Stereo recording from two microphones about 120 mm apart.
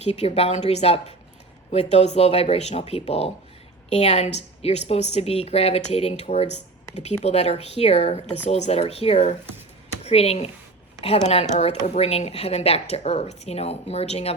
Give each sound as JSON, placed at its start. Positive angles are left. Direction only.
{"t": 0.0, "sound": "a woman's voice", "side_deg": 60}